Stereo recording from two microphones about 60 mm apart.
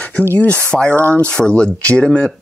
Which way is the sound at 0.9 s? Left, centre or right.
Right.